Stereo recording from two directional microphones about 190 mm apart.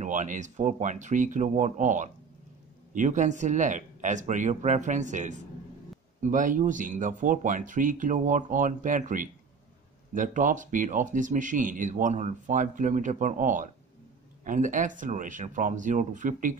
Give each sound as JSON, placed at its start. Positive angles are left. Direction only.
{"t": 0.0, "sound": "speech", "side_deg": -40}